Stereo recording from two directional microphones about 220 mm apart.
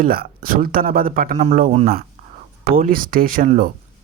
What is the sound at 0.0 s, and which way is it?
Speech, 40° right (ahead or behind).